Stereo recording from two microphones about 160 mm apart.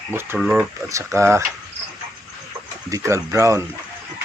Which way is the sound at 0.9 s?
20° right (ahead or behind).